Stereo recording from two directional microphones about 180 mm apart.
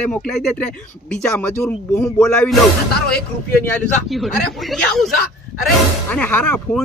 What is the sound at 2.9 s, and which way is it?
Speech, 60° left (ahead or behind).